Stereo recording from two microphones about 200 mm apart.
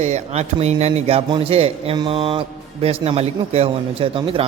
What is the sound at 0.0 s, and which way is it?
A man's voice, 35° right (ahead or behind).